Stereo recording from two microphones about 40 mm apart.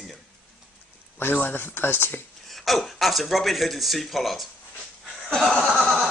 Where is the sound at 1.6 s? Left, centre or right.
Left.